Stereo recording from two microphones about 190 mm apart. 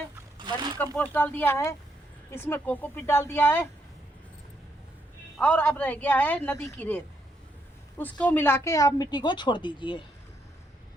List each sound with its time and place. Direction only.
0.3 s a sound: 25° right (ahead or behind)
0.9 s speech: 10° left (ahead or behind)
5.4 s a woman's voice: 5° left (ahead or behind); by 10.0 s 25° left (ahead or behind)